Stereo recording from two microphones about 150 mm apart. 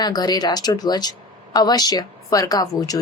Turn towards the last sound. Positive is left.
turn(degrees=25)  # may be behind; listen again after turning